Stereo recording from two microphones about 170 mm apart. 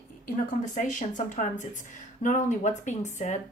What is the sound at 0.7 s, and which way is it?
Speech, 50° left (ahead or behind).